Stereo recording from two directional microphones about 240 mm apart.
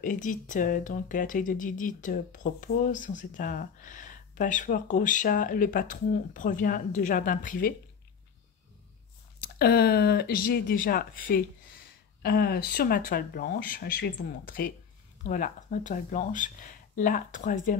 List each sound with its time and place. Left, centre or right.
0.0 s speech: left
9.4 s speech: left